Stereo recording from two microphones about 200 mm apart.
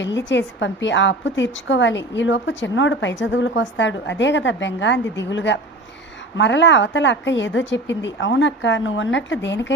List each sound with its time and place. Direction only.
0.0 s a woman's voice: 65° left (ahead or behind)